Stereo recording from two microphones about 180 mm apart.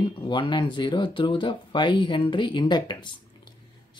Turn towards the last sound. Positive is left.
turn(degrees=25)  # may be behind; listen again after turning